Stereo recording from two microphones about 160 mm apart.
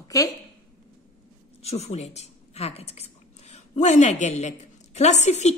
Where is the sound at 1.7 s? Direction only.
40° left (ahead or behind).